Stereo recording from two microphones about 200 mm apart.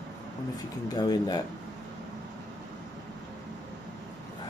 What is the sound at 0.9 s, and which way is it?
Speech, 20° left (ahead or behind).